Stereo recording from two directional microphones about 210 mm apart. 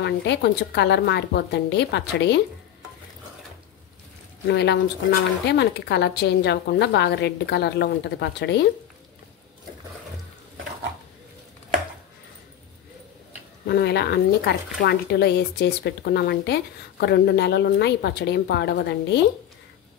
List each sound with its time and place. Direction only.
0.0 s speech: 55° left (ahead or behind)
4.5 s speech: 50° left (ahead or behind)
13.7 s speech: 50° left (ahead or behind)